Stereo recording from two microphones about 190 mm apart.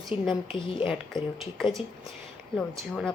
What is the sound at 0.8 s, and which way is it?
A woman's voice, centre (ahead or behind).